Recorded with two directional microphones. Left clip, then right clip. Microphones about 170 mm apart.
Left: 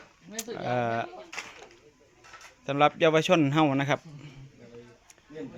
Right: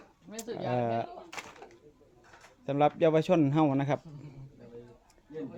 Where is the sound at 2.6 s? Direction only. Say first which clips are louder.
Left 3 dB; 10° right (ahead or behind).